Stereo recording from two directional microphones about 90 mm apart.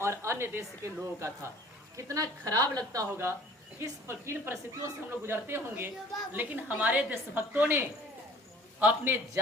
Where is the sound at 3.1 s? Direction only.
25° right (ahead or behind).